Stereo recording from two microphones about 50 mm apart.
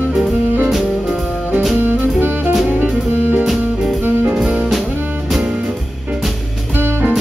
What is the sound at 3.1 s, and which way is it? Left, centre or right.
Music, right.